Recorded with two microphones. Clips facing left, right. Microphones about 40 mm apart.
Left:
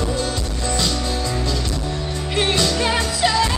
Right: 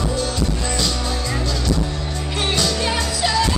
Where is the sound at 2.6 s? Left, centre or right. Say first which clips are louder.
Left 1 dB; centre.